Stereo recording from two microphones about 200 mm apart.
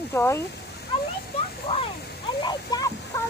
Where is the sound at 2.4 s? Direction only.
20° left (ahead or behind).